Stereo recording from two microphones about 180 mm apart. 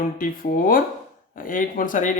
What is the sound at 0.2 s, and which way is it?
Speech, 50° left (ahead or behind).